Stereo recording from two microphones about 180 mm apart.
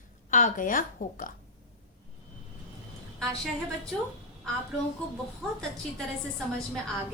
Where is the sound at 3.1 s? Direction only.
Centre (ahead or behind).